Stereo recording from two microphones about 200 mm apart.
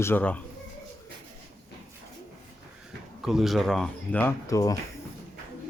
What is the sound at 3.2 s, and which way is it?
Speech, centre (ahead or behind).